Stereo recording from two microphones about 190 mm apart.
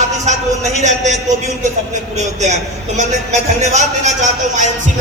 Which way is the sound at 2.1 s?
35° right (ahead or behind).